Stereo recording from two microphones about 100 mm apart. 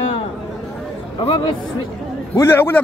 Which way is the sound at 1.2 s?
60° left (ahead or behind).